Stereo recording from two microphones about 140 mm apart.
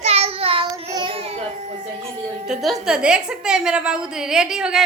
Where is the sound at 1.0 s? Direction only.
45° right (ahead or behind).